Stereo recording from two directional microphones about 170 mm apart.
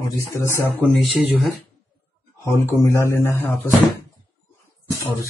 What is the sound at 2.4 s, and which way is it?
Speech, 15° left (ahead or behind).